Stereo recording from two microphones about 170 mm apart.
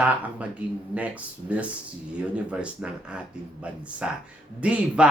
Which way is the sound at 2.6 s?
5° right (ahead or behind).